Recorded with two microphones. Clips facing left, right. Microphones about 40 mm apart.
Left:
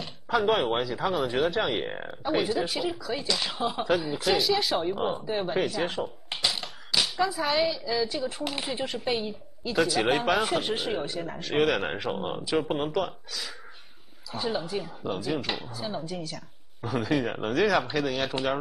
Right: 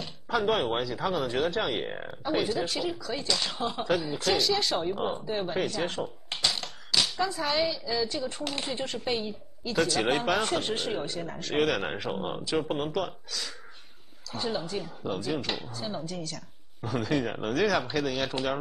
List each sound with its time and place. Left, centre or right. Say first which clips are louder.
0.0 s speech: left 2 dB; centre